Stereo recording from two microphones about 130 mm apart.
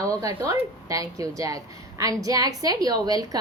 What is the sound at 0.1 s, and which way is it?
A woman's voice, 25° right (ahead or behind).